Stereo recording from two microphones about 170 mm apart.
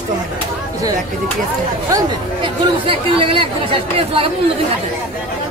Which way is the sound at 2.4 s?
30° right (ahead or behind).